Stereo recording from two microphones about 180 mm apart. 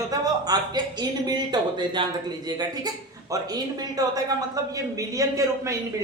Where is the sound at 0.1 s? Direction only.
20° right (ahead or behind).